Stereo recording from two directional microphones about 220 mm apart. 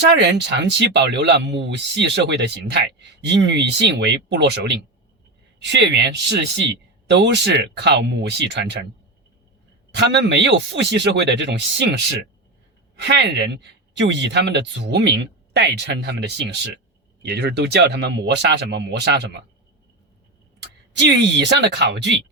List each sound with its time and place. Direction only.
0.0 s speech: 50° right (ahead or behind)
9.9 s speech: 55° right (ahead or behind)
13.0 s speech: 50° right (ahead or behind)
20.6 s speech: 50° right (ahead or behind)